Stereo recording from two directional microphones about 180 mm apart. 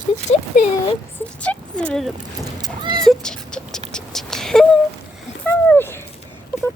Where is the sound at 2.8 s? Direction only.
25° right (ahead or behind).